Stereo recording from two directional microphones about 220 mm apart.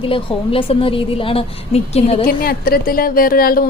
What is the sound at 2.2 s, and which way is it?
Speech, 40° left (ahead or behind).